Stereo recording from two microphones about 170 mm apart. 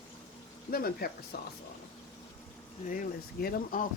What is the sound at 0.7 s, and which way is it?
Speech, 60° left (ahead or behind).